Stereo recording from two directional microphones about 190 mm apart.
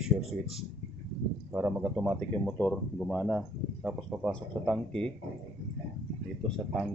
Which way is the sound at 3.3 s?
10° right (ahead or behind).